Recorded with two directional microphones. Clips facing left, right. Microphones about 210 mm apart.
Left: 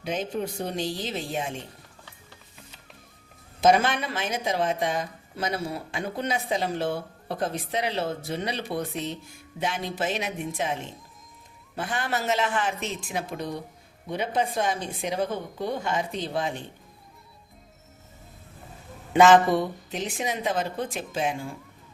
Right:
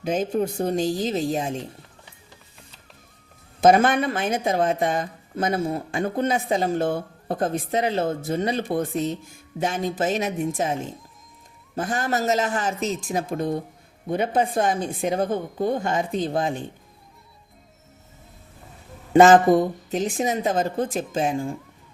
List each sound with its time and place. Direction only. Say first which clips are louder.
0.0 s speech: right 6 dB; 45° right (ahead or behind)
3.6 s speech: right 4 dB; 50° right (ahead or behind)
11.8 s speech: right 5 dB; 45° right (ahead or behind)
19.1 s speech: right 4 dB; 45° right (ahead or behind)